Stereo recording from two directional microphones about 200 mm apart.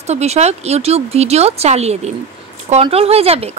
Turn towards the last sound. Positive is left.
turn(degrees=-30)  # may be behind; listen again after turning